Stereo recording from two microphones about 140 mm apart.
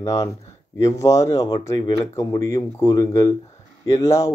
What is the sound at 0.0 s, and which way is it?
Speech, 25° left (ahead or behind).